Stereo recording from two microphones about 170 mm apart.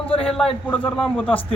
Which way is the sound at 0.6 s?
10° left (ahead or behind).